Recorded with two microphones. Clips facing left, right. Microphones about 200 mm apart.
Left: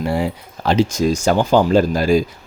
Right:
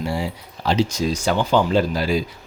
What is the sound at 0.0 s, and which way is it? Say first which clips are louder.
Speech: left 5 dB; 55° left (ahead or behind).